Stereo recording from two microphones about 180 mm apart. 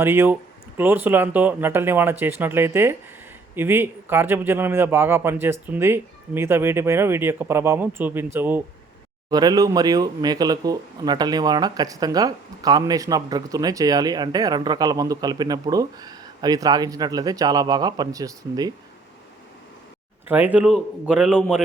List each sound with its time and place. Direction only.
0.0 s a man's voice: 10° right (ahead or behind)
9.3 s speech: 20° right (ahead or behind)
20.2 s a man's voice: 10° right (ahead or behind)